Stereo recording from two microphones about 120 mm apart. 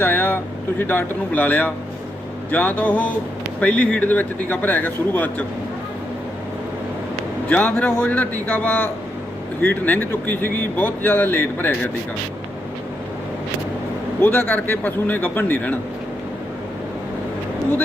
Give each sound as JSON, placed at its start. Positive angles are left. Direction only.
{"t": 0.0, "sound": "speech", "side_deg": 15}
{"t": 7.4, "sound": "speech", "side_deg": 10}
{"t": 14.2, "sound": "speech", "side_deg": 15}